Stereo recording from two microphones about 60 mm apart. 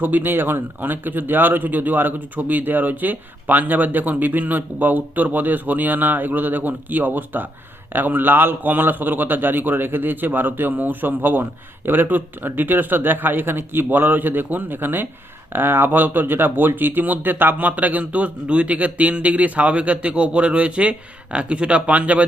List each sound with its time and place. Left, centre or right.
0.0 s a man's voice: right